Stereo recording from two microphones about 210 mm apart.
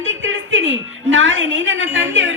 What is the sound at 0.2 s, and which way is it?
A woman's voice, 65° right (ahead or behind).